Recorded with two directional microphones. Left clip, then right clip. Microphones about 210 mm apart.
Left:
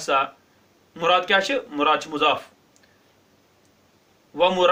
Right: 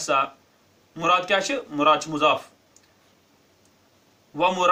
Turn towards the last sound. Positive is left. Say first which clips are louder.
# left 2 dB
turn(degrees=25)  # may be behind; listen again after turning